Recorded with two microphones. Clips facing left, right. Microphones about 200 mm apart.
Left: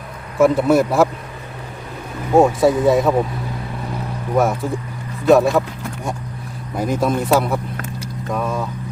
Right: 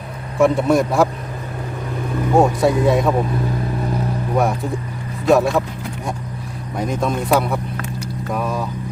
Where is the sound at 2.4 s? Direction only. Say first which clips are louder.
Left 2 dB; centre (ahead or behind).